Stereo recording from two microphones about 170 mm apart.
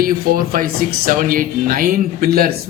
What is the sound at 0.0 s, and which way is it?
A man's voice, 60° right (ahead or behind).